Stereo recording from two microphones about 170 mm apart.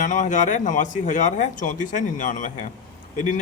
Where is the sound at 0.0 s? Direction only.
45° left (ahead or behind).